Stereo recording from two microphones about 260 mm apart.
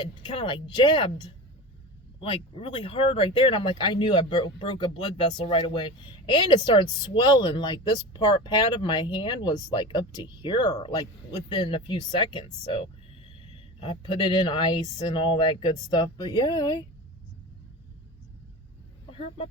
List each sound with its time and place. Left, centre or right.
0.0 s speech: centre
2.3 s speech: left
19.1 s speech: centre